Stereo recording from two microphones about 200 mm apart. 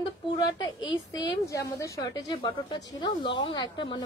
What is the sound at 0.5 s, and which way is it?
Speech, 20° left (ahead or behind).